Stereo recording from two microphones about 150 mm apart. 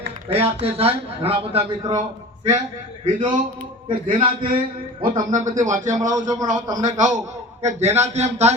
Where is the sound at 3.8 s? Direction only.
35° right (ahead or behind).